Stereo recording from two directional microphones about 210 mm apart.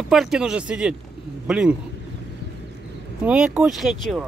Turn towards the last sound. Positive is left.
turn(degrees=0)  # may be behind; listen again after turning